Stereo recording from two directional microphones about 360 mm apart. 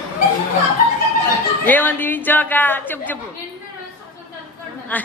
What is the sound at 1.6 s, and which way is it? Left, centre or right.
Speech, centre.